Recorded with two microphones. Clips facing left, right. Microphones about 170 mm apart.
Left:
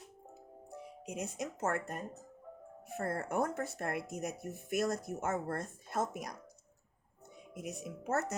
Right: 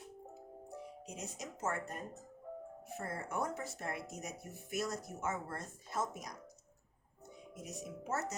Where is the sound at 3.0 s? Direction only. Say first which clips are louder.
Left 5 dB; 55° left (ahead or behind).